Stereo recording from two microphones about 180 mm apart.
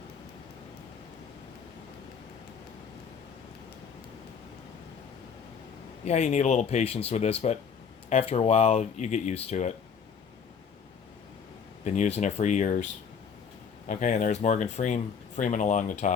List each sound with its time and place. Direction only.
6.1 s speech: 40° left (ahead or behind)
11.9 s speech: 40° left (ahead or behind)
13.8 s speech: 45° left (ahead or behind)